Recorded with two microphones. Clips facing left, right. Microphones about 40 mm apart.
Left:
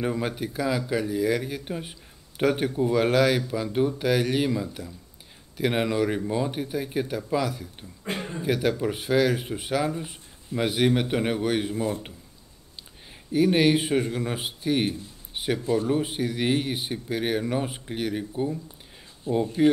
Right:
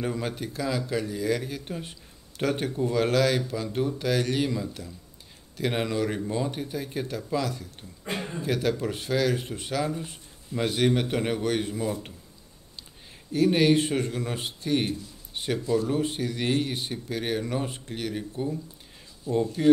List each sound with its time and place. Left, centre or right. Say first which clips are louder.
0.0 s speech: left 3 dB; centre
13.3 s speech: left 1 dB; centre
15.3 s a sound: left 2 dB; centre
15.9 s speech: left 2 dB; centre